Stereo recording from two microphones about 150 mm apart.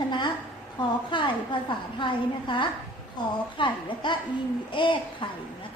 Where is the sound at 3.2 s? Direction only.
30° left (ahead or behind).